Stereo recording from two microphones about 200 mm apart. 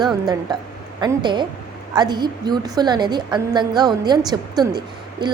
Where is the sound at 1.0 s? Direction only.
25° right (ahead or behind).